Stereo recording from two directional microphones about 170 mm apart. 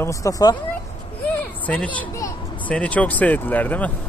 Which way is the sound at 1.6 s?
10° left (ahead or behind).